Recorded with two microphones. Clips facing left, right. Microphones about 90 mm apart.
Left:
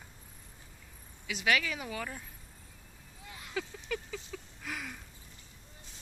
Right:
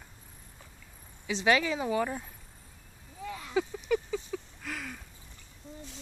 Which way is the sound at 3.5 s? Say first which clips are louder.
Right 8 dB; 20° right (ahead or behind).